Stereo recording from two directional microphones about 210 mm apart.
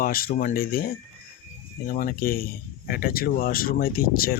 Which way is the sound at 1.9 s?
45° left (ahead or behind).